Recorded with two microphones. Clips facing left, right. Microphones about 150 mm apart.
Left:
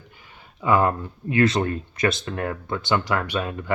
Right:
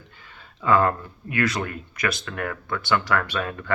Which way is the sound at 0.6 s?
15° left (ahead or behind).